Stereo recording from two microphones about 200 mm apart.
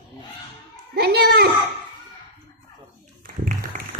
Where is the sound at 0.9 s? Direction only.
55° right (ahead or behind).